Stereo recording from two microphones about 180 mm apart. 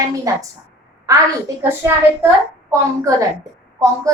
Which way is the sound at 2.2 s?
15° right (ahead or behind).